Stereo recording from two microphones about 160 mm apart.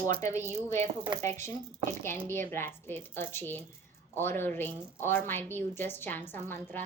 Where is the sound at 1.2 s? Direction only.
15° left (ahead or behind).